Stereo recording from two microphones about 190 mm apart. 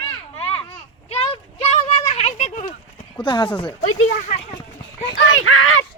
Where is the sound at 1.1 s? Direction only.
30° left (ahead or behind).